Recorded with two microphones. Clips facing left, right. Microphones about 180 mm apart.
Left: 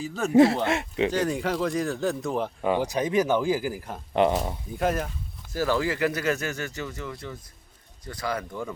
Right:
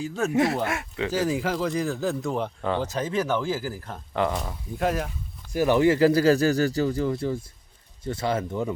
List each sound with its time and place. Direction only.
0.0 s speech: centre (ahead or behind)
0.3 s speech: 30° left (ahead or behind)
1.1 s speech: 5° right (ahead or behind)
2.6 s speech: 15° left (ahead or behind)
4.7 s speech: centre (ahead or behind)
5.5 s speech: 20° right (ahead or behind)